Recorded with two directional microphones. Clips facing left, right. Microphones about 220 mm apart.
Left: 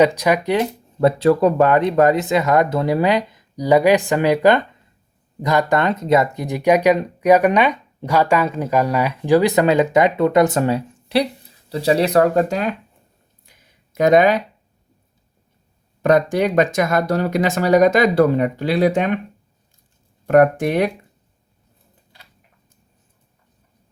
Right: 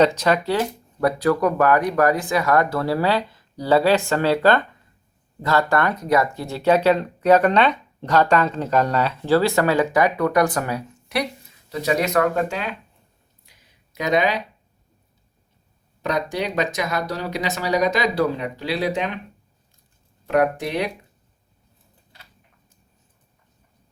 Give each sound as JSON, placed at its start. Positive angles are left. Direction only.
{"t": 0.0, "sound": "speech", "side_deg": 10}
{"t": 13.9, "sound": "speech", "side_deg": 50}
{"t": 16.0, "sound": "speech", "side_deg": 50}
{"t": 20.2, "sound": "speech", "side_deg": 50}